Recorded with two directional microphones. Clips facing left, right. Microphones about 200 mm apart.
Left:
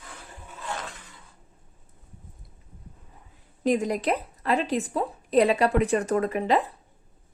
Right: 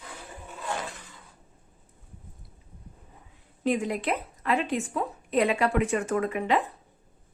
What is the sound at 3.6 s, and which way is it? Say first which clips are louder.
A woman's voice: left 3 dB; 40° left (ahead or behind).